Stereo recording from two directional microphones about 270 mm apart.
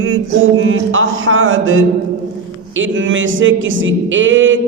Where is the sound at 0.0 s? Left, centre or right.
Right.